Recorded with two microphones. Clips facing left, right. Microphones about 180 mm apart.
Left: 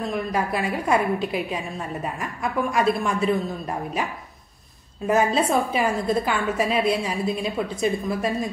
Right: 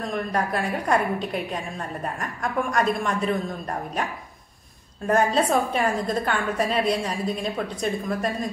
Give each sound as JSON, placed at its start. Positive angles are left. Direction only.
{"t": 0.1, "sound": "a woman's voice", "side_deg": 5}